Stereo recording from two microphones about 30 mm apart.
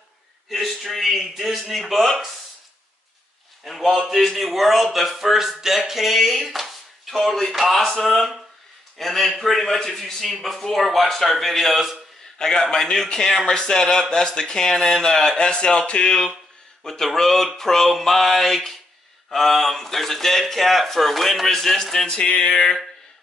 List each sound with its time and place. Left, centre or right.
0.5 s a man's voice: centre
3.6 s speech: centre
5.9 s a sound: centre
6.1 s speech: centre
12.4 s a man's voice: left
15.3 s speech: left
16.8 s speech: centre
22.0 s speech: left